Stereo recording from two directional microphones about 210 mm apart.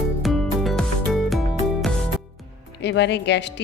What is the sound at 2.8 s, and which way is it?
Speech, 55° left (ahead or behind).